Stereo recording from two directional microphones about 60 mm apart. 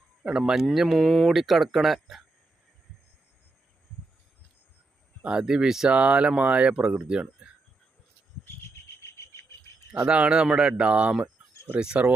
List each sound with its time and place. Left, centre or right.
0.2 s speech: centre
0.9 s speech: centre
1.3 s speech: centre
5.2 s speech: centre
5.9 s speech: right
9.0 s cricket: left
9.9 s speech: right